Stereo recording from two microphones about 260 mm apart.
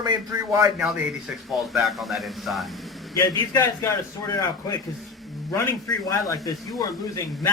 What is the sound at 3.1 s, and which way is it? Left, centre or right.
Speech, centre.